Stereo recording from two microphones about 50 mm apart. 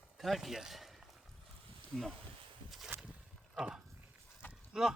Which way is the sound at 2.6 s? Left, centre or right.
Centre.